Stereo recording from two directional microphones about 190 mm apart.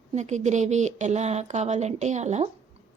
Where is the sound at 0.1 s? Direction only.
35° right (ahead or behind).